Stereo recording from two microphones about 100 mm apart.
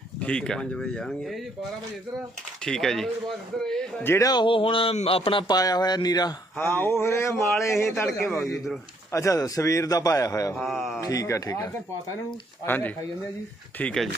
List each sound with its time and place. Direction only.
0.2 s speech: 10° left (ahead or behind)
2.6 s speech: 5° left (ahead or behind)
4.0 s speech: 25° left (ahead or behind)
4.3 s speech: 50° left (ahead or behind)
5.5 s a man's voice: 40° left (ahead or behind)
6.6 s speech: 20° left (ahead or behind)
8.2 s speech: centre (ahead or behind)
9.1 s a man's voice: 35° left (ahead or behind)
10.5 s speech: centre (ahead or behind)
11.0 s a man's voice: 35° left (ahead or behind)
12.6 s speech: 20° left (ahead or behind)